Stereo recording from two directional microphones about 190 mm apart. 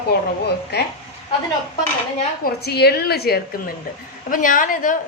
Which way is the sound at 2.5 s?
55° left (ahead or behind).